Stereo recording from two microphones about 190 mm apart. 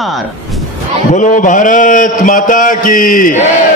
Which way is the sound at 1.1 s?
40° left (ahead or behind).